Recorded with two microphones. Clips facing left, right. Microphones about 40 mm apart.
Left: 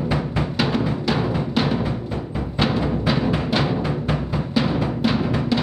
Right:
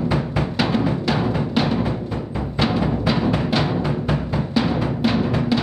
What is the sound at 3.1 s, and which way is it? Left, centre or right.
Music, centre.